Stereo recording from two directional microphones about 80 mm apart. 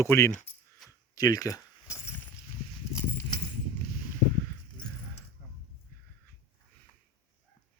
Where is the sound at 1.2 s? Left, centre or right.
Left.